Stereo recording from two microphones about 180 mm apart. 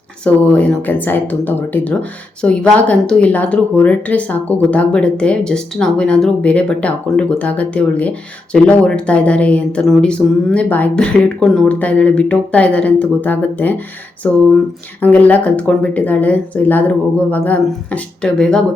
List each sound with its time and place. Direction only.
0.3 s speech: 10° left (ahead or behind)